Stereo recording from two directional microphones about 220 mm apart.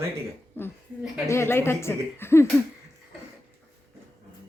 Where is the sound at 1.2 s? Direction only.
10° left (ahead or behind).